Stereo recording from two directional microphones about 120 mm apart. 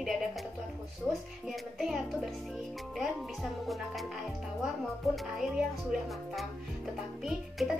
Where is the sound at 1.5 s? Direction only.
Centre (ahead or behind).